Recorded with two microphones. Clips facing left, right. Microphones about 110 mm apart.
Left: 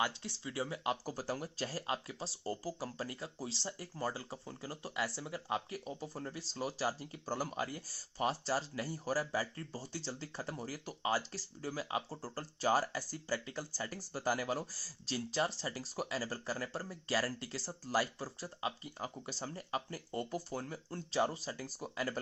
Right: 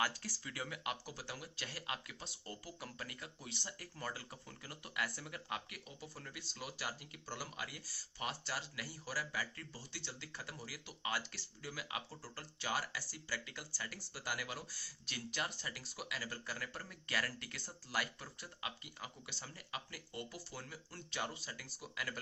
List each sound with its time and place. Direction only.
0.0 s speech: 25° left (ahead or behind)
1.0 s speech: 40° left (ahead or behind)